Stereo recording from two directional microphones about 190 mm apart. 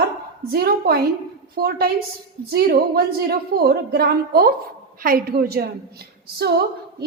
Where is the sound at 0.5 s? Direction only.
55° right (ahead or behind).